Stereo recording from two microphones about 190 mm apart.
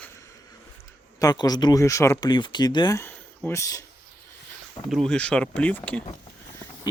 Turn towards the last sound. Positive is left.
turn(degrees=10)  # may be behind; listen again after turning